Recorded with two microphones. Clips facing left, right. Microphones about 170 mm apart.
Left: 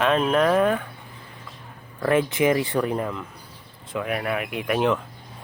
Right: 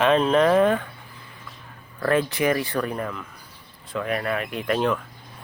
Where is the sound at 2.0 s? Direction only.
15° left (ahead or behind).